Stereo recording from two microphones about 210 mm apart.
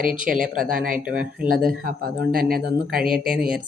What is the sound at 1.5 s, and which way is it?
Speech, 45° right (ahead or behind).